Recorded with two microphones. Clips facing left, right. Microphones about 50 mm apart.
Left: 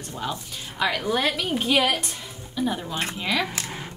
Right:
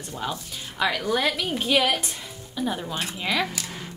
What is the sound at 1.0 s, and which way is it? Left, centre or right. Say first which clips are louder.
A woman's voice: even; centre.